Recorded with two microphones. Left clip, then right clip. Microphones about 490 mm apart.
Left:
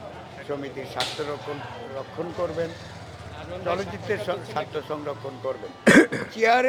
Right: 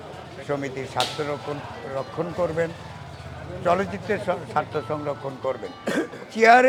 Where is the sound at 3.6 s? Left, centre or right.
Right.